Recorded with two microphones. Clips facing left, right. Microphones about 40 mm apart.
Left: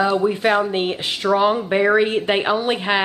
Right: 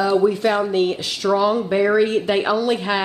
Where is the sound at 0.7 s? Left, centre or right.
Left.